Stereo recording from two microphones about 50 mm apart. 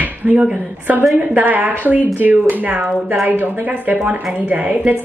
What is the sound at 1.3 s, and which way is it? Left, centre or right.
A woman's voice, right.